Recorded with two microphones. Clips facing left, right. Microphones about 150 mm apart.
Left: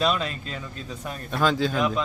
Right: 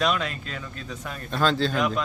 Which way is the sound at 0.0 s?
30° left (ahead or behind).